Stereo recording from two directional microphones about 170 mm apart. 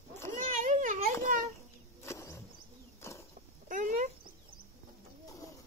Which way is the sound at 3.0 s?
15° left (ahead or behind).